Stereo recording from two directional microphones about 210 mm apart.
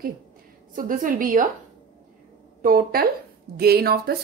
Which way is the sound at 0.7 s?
40° right (ahead or behind).